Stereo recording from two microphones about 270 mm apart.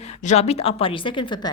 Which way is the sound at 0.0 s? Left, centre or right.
Left.